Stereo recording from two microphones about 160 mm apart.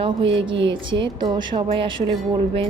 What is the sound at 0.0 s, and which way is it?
A woman's voice, 30° right (ahead or behind).